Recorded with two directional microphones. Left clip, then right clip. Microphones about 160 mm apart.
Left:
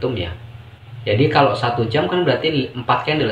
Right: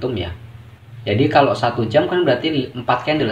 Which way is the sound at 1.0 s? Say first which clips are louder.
Even; 60° right (ahead or behind).